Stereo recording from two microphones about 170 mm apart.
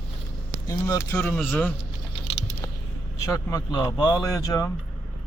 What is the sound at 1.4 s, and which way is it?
Speech, centre (ahead or behind).